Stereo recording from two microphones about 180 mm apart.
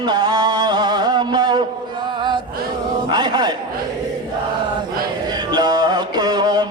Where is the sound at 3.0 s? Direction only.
25° right (ahead or behind).